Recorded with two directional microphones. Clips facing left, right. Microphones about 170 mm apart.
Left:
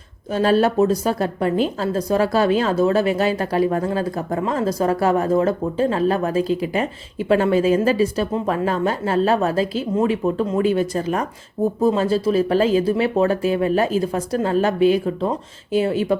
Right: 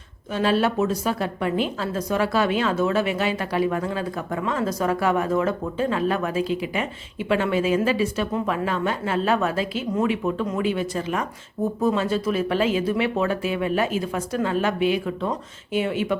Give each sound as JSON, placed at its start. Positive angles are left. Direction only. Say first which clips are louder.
{"t": 0.3, "sound": "a woman's voice", "louder": "left 5 dB", "side_deg": 40}